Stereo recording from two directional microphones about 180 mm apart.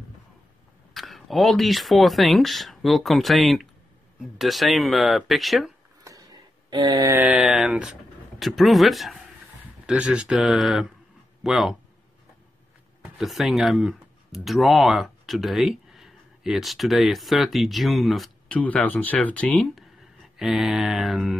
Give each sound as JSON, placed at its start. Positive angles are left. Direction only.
{"t": 0.9, "sound": "speech", "side_deg": 0}
{"t": 6.1, "sound": "a sound", "side_deg": -15}
{"t": 6.7, "sound": "speech", "side_deg": -25}
{"t": 13.0, "sound": "speech", "side_deg": 0}